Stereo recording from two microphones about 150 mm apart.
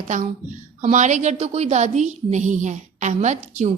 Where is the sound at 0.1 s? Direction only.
55° right (ahead or behind).